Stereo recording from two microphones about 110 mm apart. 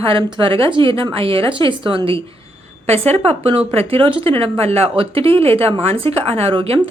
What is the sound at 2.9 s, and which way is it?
Speech, 70° right (ahead or behind).